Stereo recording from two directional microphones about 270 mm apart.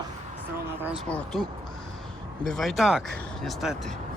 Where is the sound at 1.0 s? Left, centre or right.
Centre.